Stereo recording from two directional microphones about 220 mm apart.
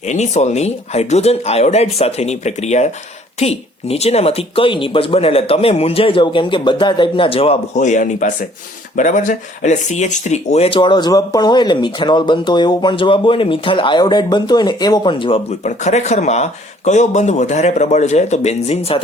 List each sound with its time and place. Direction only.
0.1 s speech: 30° left (ahead or behind)